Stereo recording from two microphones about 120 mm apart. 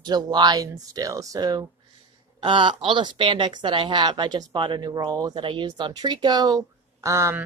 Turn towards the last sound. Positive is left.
turn(degrees=-25)  # may be behind; listen again after turning